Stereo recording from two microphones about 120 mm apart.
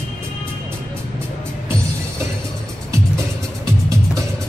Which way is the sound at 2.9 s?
25° right (ahead or behind).